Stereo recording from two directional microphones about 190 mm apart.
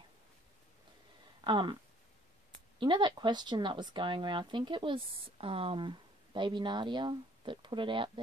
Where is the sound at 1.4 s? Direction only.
25° right (ahead or behind).